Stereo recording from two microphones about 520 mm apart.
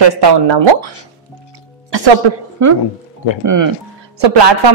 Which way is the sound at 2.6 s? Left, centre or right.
Right.